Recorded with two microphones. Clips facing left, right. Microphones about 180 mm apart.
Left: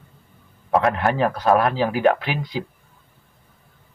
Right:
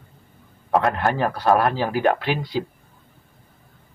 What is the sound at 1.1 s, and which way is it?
Speech, 15° left (ahead or behind).